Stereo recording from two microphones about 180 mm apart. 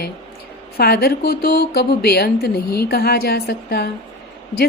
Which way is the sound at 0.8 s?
60° left (ahead or behind).